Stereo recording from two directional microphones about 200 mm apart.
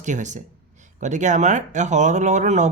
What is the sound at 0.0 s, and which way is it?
A man's voice, 35° right (ahead or behind).